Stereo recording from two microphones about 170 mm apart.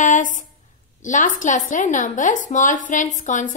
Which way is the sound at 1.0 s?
50° left (ahead or behind).